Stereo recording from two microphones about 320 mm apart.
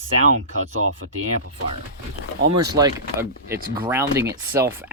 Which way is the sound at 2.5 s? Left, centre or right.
Centre.